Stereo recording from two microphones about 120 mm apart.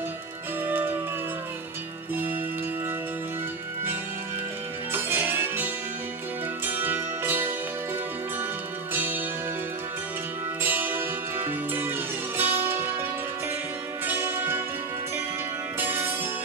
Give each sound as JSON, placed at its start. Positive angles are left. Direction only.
{"t": 0.7, "sound": "music", "side_deg": -15}
{"t": 4.9, "sound": "music", "side_deg": -15}
{"t": 8.9, "sound": "music", "side_deg": -15}
{"t": 10.6, "sound": "music", "side_deg": -15}
{"t": 14.0, "sound": "music", "side_deg": -15}
{"t": 15.8, "sound": "music", "side_deg": -15}